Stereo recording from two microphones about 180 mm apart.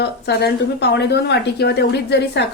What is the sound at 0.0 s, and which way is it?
A woman's voice, 65° left (ahead or behind).